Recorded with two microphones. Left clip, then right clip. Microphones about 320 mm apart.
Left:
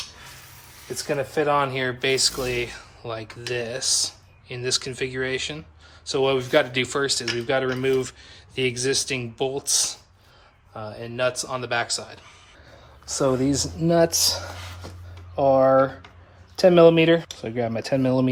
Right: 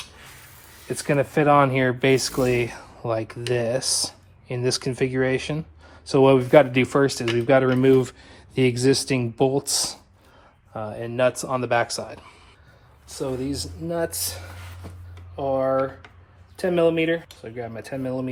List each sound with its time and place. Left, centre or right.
0.9 s speech: centre
10.8 s speech: centre
13.1 s speech: centre
15.4 s speech: left